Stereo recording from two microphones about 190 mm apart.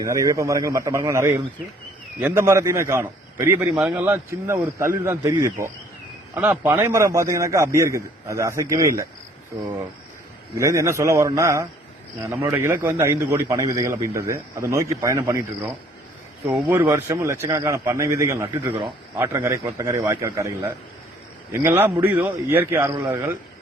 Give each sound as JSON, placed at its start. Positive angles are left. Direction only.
{"t": 0.0, "sound": "a man's voice", "side_deg": -15}
{"t": 10.6, "sound": "a man's voice", "side_deg": -15}